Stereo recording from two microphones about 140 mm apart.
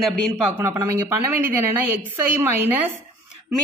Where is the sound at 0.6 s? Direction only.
20° right (ahead or behind).